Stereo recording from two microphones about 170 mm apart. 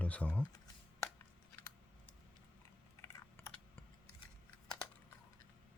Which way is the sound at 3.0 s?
15° left (ahead or behind).